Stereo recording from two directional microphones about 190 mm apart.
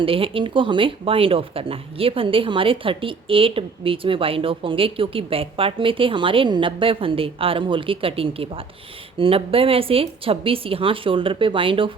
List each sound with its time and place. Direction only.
0.0 s speech: 30° right (ahead or behind)